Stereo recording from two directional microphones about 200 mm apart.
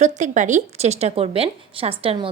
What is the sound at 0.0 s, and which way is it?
A woman's voice, 35° right (ahead or behind).